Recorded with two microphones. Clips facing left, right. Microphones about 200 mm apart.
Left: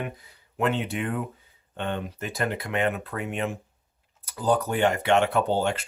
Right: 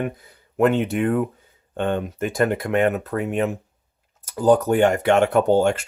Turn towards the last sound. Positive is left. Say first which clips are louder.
# right 7 dB
turn(degrees=-45)  # may be behind; listen again after turning